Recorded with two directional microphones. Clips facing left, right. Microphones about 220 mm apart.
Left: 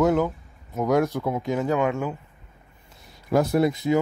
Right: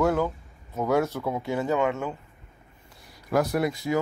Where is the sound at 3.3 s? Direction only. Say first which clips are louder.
Left 4 dB; 25° left (ahead or behind).